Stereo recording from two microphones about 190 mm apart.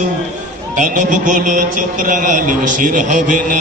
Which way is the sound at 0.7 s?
45° right (ahead or behind).